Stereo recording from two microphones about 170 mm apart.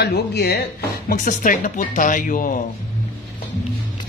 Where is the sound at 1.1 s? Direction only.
50° left (ahead or behind).